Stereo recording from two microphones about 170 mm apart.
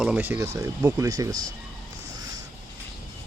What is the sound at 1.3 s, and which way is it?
Speech, 50° right (ahead or behind).